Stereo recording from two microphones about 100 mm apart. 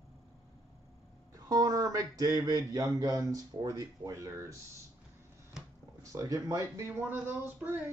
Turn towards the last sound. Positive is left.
turn(degrees=-20)  # may be behind; listen again after turning